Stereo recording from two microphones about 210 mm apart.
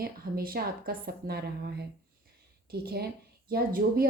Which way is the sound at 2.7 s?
50° right (ahead or behind).